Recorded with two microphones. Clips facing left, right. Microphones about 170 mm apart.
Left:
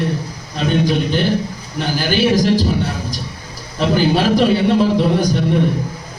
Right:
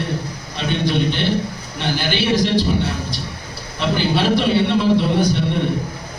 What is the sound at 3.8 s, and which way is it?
A man's voice, 40° left (ahead or behind).